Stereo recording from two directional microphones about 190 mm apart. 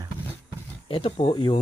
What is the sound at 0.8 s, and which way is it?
Speech, 30° left (ahead or behind).